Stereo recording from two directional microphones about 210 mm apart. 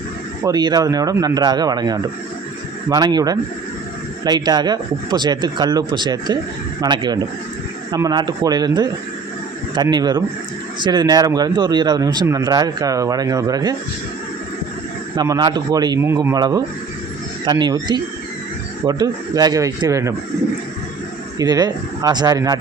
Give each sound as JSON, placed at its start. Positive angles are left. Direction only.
{"t": 0.4, "sound": "speech", "side_deg": -20}
{"t": 15.1, "sound": "speech", "side_deg": -20}
{"t": 21.3, "sound": "speech", "side_deg": -20}